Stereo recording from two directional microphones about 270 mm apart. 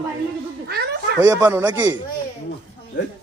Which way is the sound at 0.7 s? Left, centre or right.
Right.